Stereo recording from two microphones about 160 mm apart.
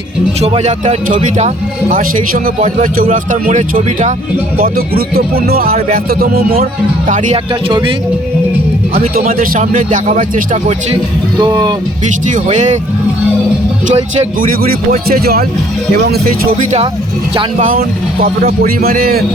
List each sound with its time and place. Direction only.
0.4 s speech: 40° right (ahead or behind)
4.5 s speech: 70° right (ahead or behind)
9.0 s speech: 60° right (ahead or behind)
11.3 s speech: 25° right (ahead or behind)
12.3 s speech: 50° right (ahead or behind)
13.8 s speech: 45° right (ahead or behind)
14.4 s speech: 65° right (ahead or behind)
16.0 s speech: 80° right; by 19.2 s 65° right (ahead or behind)